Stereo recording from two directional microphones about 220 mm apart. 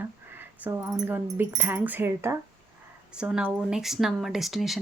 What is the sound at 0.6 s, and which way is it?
Speech, 10° right (ahead or behind).